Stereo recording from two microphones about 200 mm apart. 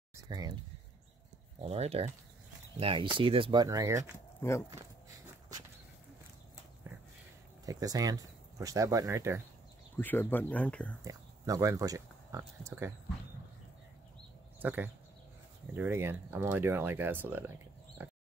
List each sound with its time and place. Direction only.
0.1 s a sound: 20° right (ahead or behind)
1.6 s speech: 30° right (ahead or behind)
4.4 s speech: 15° left (ahead or behind)
7.6 s speech: 20° right (ahead or behind)
9.9 s speech: 10° left (ahead or behind)
11.1 s speech: 15° right (ahead or behind)
14.6 s speech: 10° right (ahead or behind)